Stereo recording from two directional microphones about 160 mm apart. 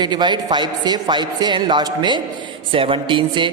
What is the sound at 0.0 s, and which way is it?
A man's voice, 30° right (ahead or behind).